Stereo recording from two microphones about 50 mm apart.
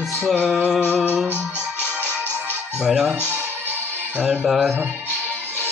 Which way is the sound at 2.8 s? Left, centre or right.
Centre.